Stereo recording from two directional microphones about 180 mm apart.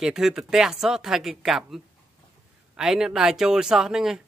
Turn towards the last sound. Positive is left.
turn(degrees=-5)  # may be behind; listen again after turning